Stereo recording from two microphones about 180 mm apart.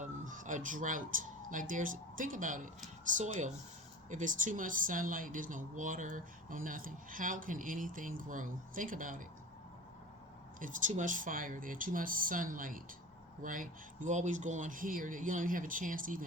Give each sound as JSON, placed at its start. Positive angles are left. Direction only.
{"t": 0.0, "sound": "a sound", "side_deg": -45}
{"t": 1.5, "sound": "speech", "side_deg": -45}
{"t": 10.6, "sound": "speech", "side_deg": -45}